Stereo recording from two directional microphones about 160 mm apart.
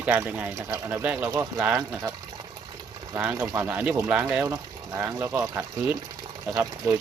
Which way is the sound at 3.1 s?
10° right (ahead or behind).